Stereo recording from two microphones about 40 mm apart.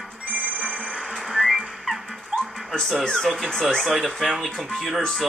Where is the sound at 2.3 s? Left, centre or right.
Centre.